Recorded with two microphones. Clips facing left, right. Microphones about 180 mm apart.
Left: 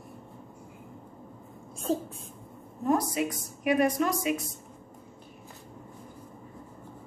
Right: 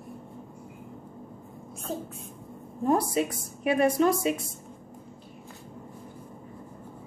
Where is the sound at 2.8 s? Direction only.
30° right (ahead or behind).